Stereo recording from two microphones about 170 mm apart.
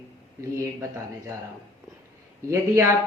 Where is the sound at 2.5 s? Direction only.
15° right (ahead or behind).